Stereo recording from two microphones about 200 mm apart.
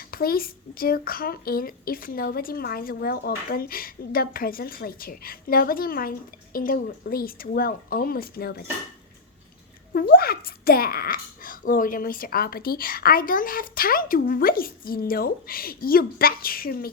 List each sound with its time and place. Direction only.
0.1 s a woman's voice: 50° left (ahead or behind)
9.9 s a woman's voice: 45° left (ahead or behind)